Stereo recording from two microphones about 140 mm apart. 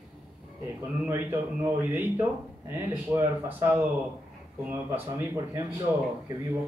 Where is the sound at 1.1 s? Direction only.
15° right (ahead or behind).